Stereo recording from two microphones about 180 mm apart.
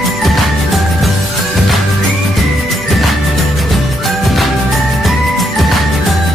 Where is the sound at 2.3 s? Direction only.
Centre (ahead or behind).